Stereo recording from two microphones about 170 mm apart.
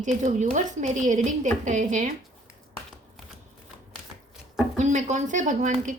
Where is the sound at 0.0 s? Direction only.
45° right (ahead or behind).